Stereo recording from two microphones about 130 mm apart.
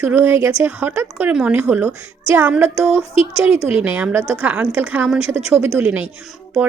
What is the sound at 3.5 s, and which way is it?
Speech, 50° left (ahead or behind).